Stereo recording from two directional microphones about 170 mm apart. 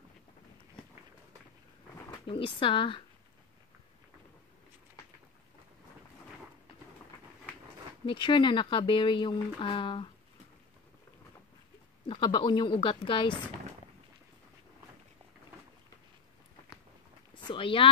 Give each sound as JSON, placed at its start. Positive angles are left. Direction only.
{"t": 2.0, "sound": "speech", "side_deg": 30}
{"t": 8.0, "sound": "speech", "side_deg": 30}
{"t": 12.1, "sound": "speech", "side_deg": 30}
{"t": 17.4, "sound": "a sound", "side_deg": 30}